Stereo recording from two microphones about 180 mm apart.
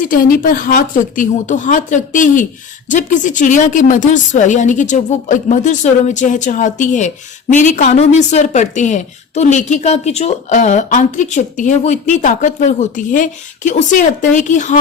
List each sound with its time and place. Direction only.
0.0 s a woman's voice: 50° left (ahead or behind)